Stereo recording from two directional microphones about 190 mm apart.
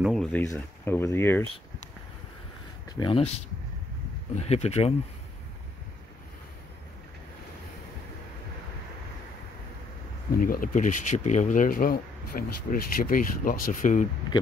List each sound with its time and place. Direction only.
0.0 s a sound: centre (ahead or behind)
0.4 s speech: 15° left (ahead or behind)
2.9 s speech: 25° left (ahead or behind)
4.3 s speech: 35° left (ahead or behind)
10.3 s speech: 50° left (ahead or behind)